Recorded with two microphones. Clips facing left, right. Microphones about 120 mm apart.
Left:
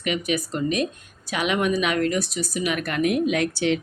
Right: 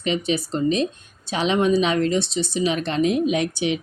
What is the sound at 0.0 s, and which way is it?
Speech, 30° right (ahead or behind).